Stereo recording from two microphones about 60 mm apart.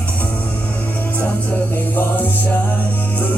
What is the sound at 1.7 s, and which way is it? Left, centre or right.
Music, left.